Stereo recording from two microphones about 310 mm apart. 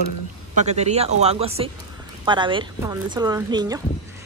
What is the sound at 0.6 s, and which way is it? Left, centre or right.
A woman's voice, right.